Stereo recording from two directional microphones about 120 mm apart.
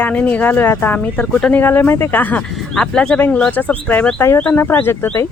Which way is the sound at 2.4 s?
5° left (ahead or behind).